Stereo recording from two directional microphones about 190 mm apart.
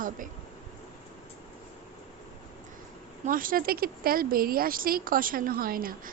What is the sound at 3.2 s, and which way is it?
A woman's voice, 45° right (ahead or behind).